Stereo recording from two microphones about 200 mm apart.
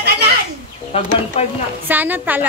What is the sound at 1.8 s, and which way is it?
Speech, 10° right (ahead or behind).